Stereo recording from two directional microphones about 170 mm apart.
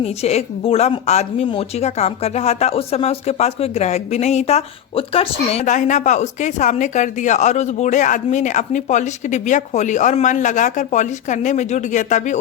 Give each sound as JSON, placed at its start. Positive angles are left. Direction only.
{"t": 0.0, "sound": "a woman's voice", "side_deg": 40}